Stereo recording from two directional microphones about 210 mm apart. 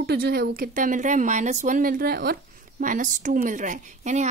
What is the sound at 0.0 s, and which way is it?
A woman's voice, 45° right (ahead or behind).